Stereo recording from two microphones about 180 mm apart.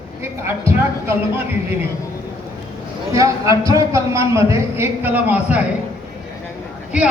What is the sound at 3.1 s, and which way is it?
A man's voice, 15° right (ahead or behind).